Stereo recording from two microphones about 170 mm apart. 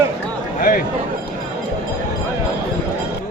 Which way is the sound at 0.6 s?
55° left (ahead or behind).